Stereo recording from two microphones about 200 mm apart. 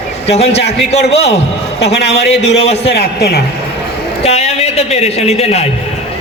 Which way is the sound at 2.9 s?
55° left (ahead or behind).